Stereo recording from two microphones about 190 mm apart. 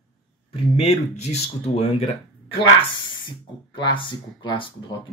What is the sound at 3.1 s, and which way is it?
Speech, 25° left (ahead or behind).